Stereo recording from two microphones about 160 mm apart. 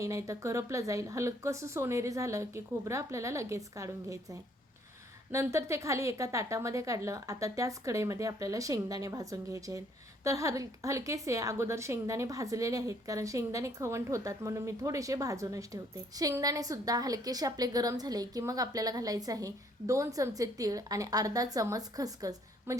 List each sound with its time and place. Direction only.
0.0 s a woman's voice: 20° right (ahead or behind)